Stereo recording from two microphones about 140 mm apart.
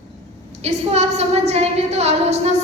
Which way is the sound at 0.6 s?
50° right (ahead or behind).